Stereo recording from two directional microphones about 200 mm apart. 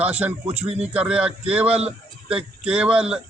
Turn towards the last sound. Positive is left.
turn(degrees=-5)  # may be behind; listen again after turning